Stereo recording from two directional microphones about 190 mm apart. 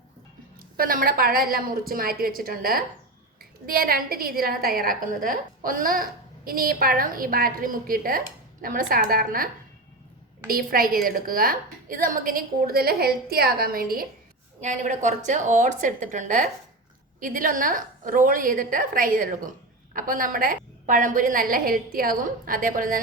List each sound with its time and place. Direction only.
0.8 s a woman's voice: 50° right (ahead or behind)
10.5 s a woman's voice: 50° right (ahead or behind)
14.6 s a woman's voice: 40° right (ahead or behind)